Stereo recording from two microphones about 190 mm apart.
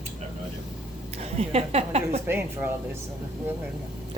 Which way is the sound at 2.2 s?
10° right (ahead or behind).